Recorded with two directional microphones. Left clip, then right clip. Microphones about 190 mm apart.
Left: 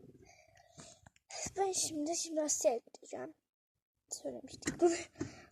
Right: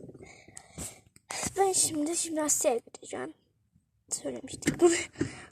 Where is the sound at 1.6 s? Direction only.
20° left (ahead or behind).